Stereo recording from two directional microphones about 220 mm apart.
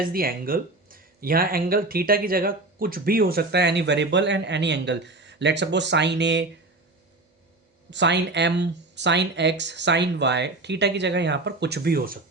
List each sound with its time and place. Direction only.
0.0 s speech: 40° right (ahead or behind)
7.9 s speech: 55° right (ahead or behind)